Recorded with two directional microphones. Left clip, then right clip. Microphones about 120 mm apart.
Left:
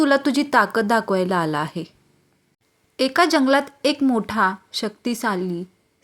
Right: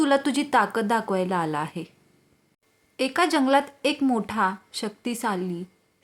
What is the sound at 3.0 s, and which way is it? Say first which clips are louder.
A woman's voice: left 5 dB; 25° left (ahead or behind).